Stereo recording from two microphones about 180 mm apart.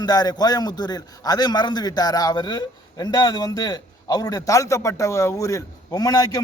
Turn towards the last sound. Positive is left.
turn(degrees=20)  # may be behind; listen again after turning